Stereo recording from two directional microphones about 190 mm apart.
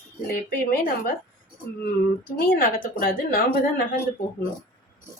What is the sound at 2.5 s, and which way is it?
Speech, 50° left (ahead or behind).